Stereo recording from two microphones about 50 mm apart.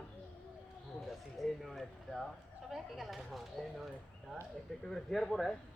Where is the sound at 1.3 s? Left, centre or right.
Centre.